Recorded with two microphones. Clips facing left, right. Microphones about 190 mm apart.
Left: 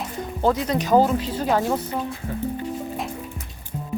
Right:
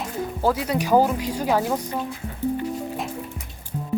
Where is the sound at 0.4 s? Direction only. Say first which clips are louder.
Left 2 dB; 10° right (ahead or behind).